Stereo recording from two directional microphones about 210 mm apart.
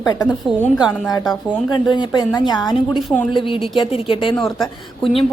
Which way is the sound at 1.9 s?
20° left (ahead or behind).